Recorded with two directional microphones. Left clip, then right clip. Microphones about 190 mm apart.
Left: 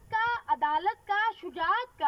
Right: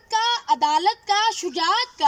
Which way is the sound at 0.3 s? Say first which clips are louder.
Right 8 dB; 20° right (ahead or behind).